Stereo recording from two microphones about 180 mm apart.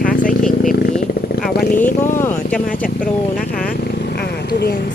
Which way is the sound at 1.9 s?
45° left (ahead or behind).